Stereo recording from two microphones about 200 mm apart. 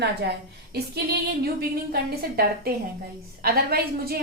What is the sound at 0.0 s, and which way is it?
A woman's voice, 55° right (ahead or behind).